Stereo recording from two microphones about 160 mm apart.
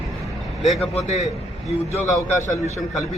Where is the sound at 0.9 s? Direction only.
45° left (ahead or behind).